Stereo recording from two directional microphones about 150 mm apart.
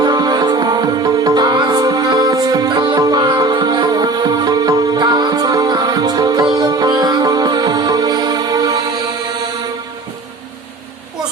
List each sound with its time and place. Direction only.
0.0 s music: 30° right (ahead or behind)